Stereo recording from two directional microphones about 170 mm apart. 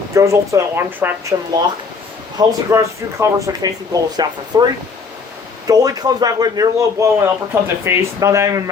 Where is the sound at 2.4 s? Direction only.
20° right (ahead or behind).